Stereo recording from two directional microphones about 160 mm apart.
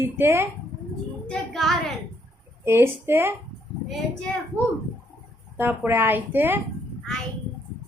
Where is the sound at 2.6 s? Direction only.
15° right (ahead or behind).